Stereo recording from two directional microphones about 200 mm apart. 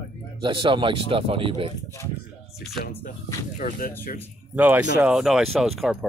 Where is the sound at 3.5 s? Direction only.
45° left (ahead or behind).